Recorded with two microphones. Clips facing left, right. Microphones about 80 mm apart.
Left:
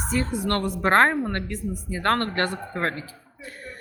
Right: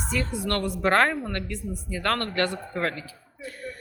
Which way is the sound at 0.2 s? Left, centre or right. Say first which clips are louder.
Left 2 dB; left.